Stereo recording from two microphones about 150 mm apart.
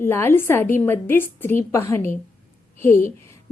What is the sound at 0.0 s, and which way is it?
A woman's voice, 15° left (ahead or behind).